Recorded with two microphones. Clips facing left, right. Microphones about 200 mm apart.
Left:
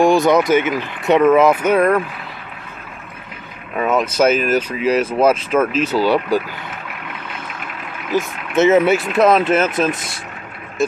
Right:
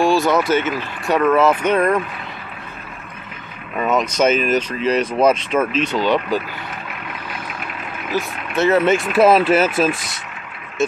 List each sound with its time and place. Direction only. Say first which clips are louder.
0.0 s speech: left 3 dB; 20° left (ahead or behind)
3.7 s speech: left 2 dB; 5° left (ahead or behind)
8.5 s speech: left 4 dB; 20° left (ahead or behind)
8.8 s speech: left 1 dB; 5° left (ahead or behind)
9.1 s speech: right 2 dB; 5° right (ahead or behind)
9.9 s speech: left 2 dB; 25° left (ahead or behind)
10.8 s speech: left 1 dB; centre (ahead or behind)